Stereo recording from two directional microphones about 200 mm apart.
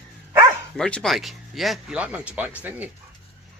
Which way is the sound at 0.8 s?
5° left (ahead or behind).